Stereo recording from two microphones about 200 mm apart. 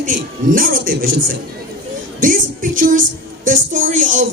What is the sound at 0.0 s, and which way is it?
A woman's voice, 45° right (ahead or behind).